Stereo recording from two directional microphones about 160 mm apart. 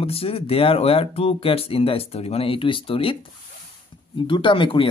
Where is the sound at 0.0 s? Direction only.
35° left (ahead or behind).